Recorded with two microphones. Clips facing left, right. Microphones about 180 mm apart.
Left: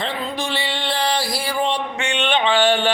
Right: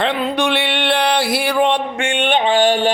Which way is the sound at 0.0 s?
70° right (ahead or behind).